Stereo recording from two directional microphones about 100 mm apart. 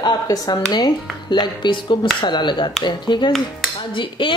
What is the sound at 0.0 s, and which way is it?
A woman's voice, 45° left (ahead or behind).